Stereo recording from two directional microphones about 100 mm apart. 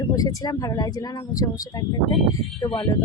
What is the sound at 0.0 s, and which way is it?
Speech, 35° left (ahead or behind).